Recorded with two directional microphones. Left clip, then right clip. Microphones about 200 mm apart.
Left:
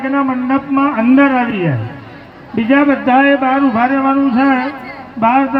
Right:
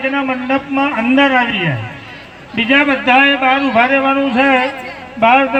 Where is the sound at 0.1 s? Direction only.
45° left (ahead or behind).